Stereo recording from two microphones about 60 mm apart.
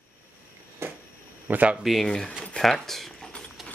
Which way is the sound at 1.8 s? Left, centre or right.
Centre.